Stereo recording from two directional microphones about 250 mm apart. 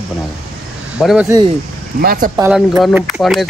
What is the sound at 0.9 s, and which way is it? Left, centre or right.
Speech, centre.